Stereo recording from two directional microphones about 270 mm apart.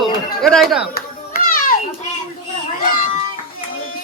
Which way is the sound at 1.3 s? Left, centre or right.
Left.